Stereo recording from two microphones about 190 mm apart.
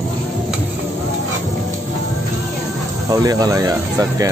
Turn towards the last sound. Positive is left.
turn(degrees=-20)  # may be behind; listen again after turning